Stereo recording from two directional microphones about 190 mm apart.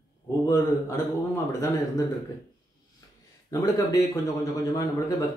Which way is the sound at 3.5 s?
20° left (ahead or behind).